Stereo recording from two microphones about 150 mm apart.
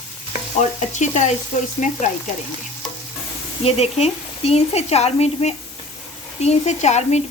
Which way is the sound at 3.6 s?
45° left (ahead or behind).